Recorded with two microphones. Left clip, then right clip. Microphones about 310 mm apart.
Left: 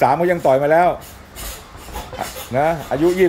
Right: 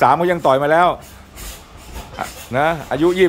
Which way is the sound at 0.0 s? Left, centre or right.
Centre.